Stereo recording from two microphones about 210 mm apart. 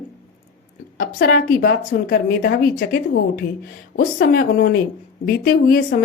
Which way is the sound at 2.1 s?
55° left (ahead or behind).